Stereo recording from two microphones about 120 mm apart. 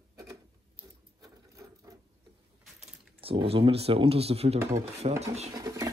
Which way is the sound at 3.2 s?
50° right (ahead or behind).